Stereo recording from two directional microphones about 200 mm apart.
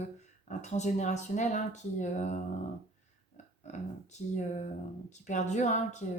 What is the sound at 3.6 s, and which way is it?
Speech, 35° left (ahead or behind).